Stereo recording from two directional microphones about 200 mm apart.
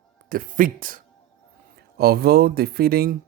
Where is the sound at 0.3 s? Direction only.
45° right (ahead or behind).